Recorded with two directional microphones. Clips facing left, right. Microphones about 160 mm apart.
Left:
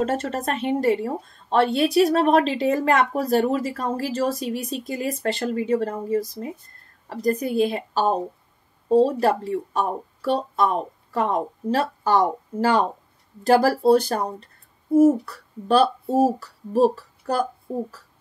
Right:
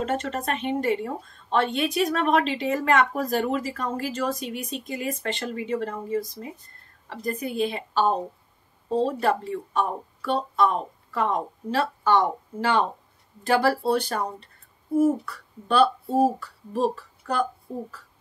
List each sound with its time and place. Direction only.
0.0 s speech: 40° left (ahead or behind)